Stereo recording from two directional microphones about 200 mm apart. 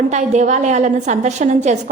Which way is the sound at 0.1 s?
35° right (ahead or behind).